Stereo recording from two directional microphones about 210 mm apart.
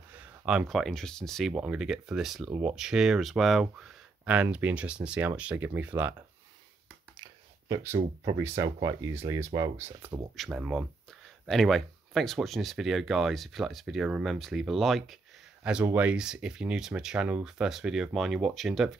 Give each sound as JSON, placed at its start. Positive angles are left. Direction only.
{"t": 0.1, "sound": "speech", "side_deg": -5}
{"t": 7.2, "sound": "a sound", "side_deg": -15}
{"t": 8.4, "sound": "speech", "side_deg": -15}
{"t": 10.3, "sound": "speech", "side_deg": 0}